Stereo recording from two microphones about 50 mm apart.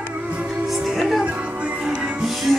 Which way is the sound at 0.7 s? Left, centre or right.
Centre.